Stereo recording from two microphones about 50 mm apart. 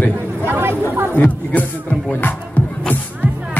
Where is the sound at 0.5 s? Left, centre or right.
Right.